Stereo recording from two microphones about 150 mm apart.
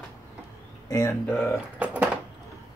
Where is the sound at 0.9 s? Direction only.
20° left (ahead or behind).